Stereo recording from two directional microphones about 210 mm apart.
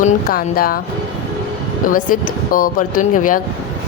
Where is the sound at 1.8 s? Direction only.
40° left (ahead or behind).